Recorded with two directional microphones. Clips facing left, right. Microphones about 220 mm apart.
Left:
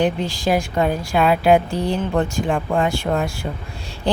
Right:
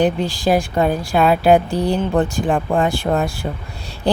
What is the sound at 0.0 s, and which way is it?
A woman's voice, 35° right (ahead or behind).